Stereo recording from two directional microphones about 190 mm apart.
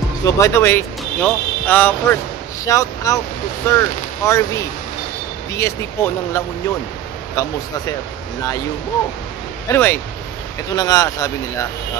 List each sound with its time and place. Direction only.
0.2 s speech: 15° left (ahead or behind)
9.7 s speech: 10° left (ahead or behind)